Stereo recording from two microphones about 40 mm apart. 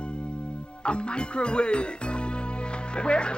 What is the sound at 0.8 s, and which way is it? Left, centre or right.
Speech, left.